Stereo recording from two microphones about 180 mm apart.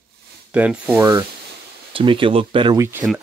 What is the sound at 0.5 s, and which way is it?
Speech, 10° right (ahead or behind).